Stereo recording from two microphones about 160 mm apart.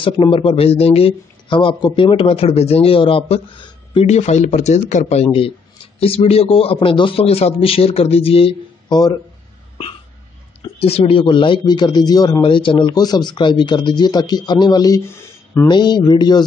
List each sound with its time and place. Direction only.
0.0 s speech: 35° left (ahead or behind)
4.1 s speech: 45° left (ahead or behind); by 9.1 s 25° left (ahead or behind)
10.8 s speech: 40° left (ahead or behind); by 15.7 s 15° left (ahead or behind)
15.7 s speech: 25° left (ahead or behind)